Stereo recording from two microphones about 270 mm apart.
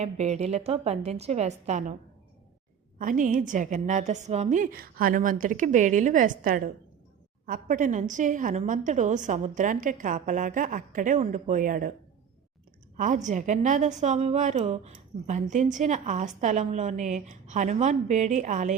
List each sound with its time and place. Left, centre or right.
0.0 s a woman's voice: right
3.0 s a woman's voice: right
13.0 s a woman's voice: right